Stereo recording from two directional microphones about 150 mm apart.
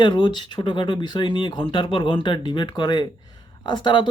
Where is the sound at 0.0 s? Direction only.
30° left (ahead or behind).